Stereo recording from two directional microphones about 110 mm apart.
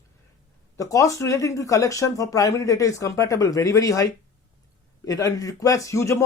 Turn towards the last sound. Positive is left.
turn(degrees=25)  # may be behind; listen again after turning